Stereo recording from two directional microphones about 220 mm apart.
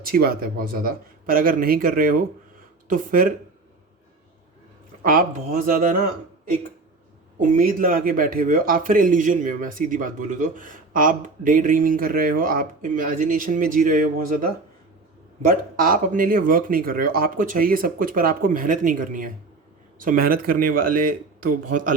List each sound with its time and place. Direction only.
0.0 s speech: 45° right (ahead or behind)
5.0 s speech: 40° right (ahead or behind)
7.3 s speech: 35° right (ahead or behind)
21.7 s speech: 90° right